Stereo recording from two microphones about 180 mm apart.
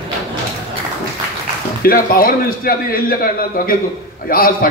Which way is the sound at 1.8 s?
55° left (ahead or behind).